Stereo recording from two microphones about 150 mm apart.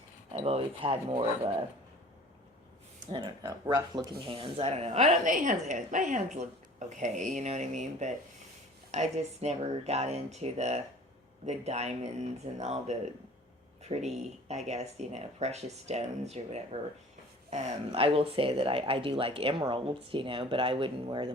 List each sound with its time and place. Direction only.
0.3 s speech: 40° right (ahead or behind)
3.1 s a woman's voice: 30° right (ahead or behind)